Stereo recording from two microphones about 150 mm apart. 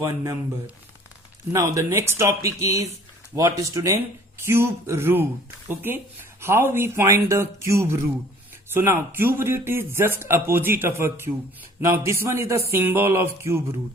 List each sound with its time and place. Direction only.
1.5 s speech: 20° right (ahead or behind)